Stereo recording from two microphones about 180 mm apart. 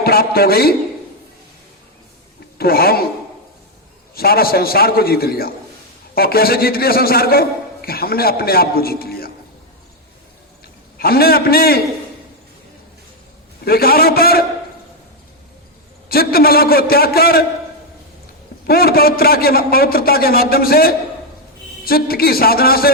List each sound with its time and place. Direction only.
0.0 s a man's voice: 55° left (ahead or behind)
2.6 s a man's voice: 55° left (ahead or behind)
4.1 s a man's voice: 55° left (ahead or behind)
10.9 s a man's voice: 60° left (ahead or behind)
13.7 s a man's voice: 55° left (ahead or behind)
16.0 s a man's voice: 55° left (ahead or behind)
18.6 s a man's voice: 60° left (ahead or behind)